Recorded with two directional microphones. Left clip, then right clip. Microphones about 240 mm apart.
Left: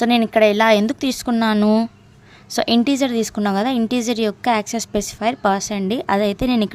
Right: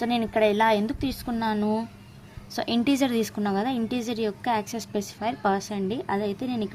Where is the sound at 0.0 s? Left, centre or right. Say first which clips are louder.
Left 8 dB; left.